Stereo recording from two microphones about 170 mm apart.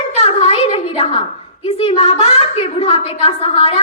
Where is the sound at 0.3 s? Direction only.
35° left (ahead or behind).